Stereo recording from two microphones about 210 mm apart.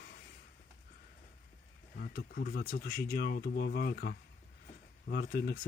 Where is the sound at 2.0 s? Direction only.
45° left (ahead or behind).